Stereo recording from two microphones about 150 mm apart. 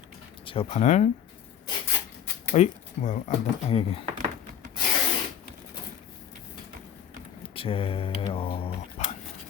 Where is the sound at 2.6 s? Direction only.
50° left (ahead or behind).